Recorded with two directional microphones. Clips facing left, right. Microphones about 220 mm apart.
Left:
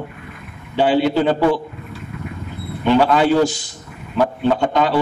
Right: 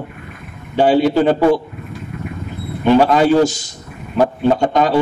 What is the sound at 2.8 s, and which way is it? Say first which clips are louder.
A man's voice: right 3 dB; 45° right (ahead or behind).